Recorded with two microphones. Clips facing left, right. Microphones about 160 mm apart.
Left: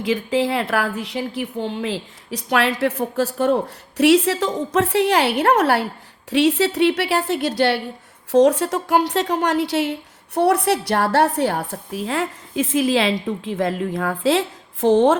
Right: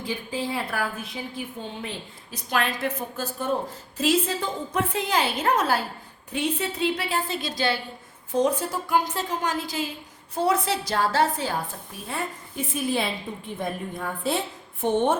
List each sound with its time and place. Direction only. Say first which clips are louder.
0.0 s a woman's voice: left 10 dB; 90° left; by 5.8 s 65° left (ahead or behind)
6.3 s a woman's voice: left 10 dB; 80° left